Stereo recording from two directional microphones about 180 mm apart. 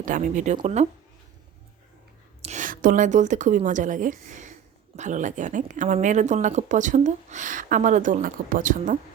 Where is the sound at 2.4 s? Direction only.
45° right (ahead or behind).